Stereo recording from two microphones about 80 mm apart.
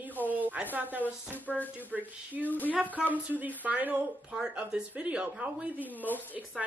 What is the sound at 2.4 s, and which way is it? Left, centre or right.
Speech, left.